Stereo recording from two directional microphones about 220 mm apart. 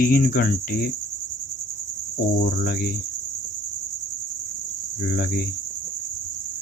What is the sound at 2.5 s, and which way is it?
Cricket, 45° left (ahead or behind).